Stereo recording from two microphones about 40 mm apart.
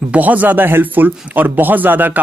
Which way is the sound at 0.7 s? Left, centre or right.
Right.